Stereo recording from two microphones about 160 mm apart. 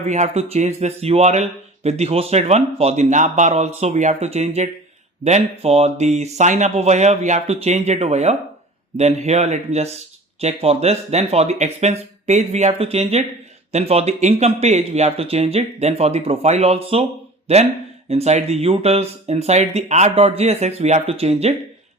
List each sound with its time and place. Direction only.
0.1 s speech: 45° right (ahead or behind)